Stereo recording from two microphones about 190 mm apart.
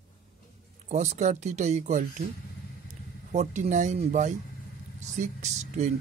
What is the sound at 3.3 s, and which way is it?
Speech, 40° right (ahead or behind).